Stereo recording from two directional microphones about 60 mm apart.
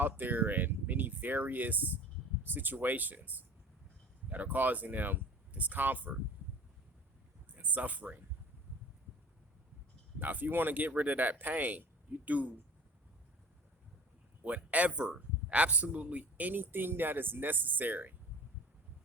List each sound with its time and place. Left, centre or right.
0.0 s speech: right
7.5 s speech: right
10.2 s speech: right
14.4 s speech: right